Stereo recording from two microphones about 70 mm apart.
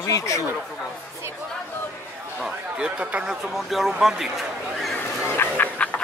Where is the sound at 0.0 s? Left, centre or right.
Left.